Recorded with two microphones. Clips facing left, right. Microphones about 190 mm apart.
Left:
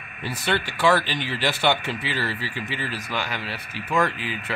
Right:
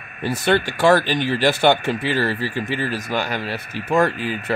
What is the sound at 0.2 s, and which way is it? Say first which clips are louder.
Speech: right 7 dB; 50° right (ahead or behind).